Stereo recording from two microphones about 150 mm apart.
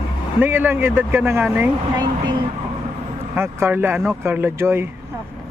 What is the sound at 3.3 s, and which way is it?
Speech, 15° right (ahead or behind).